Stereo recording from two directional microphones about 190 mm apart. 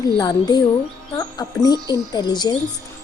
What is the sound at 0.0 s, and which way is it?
A woman's voice, 20° left (ahead or behind).